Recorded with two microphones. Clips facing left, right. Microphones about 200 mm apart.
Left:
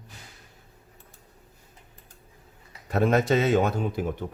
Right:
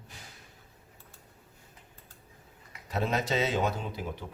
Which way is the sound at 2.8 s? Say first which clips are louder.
Left 8 dB; 55° left (ahead or behind).